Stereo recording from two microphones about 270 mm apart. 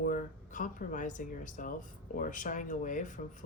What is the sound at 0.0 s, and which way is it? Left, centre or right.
Speech, left.